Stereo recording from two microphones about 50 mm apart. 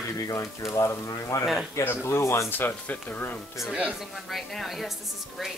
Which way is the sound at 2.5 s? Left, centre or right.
Left.